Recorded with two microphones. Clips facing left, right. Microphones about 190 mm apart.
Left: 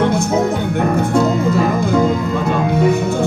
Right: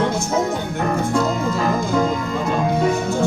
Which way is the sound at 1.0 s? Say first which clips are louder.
Left 5 dB; 60° left (ahead or behind).